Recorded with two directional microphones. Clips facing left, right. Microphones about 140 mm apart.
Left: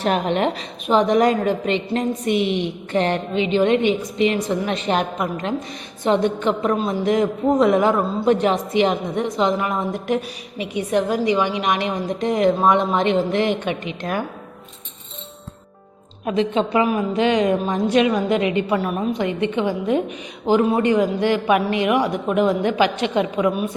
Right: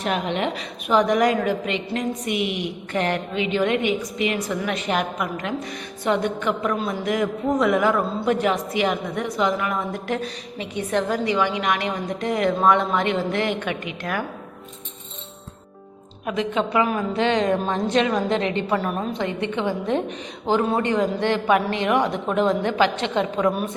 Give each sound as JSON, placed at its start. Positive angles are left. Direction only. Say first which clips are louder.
{"t": 0.0, "sound": "a woman's voice", "louder": "left 4 dB", "side_deg": 40}
{"t": 0.9, "sound": "a woman's voice", "louder": "left 2 dB", "side_deg": 25}
{"t": 16.2, "sound": "a woman's voice", "louder": "left 4 dB", "side_deg": 25}